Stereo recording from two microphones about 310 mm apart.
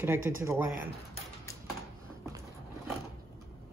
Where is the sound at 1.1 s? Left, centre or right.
Centre.